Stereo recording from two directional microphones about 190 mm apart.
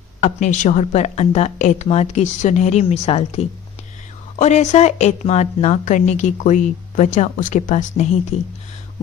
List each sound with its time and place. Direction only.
0.2 s a woman's voice: 40° left (ahead or behind)